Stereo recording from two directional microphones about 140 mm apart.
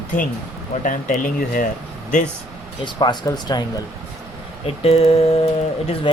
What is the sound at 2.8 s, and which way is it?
Speech, 30° left (ahead or behind).